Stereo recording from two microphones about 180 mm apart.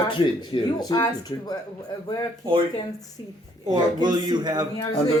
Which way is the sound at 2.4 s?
30° right (ahead or behind).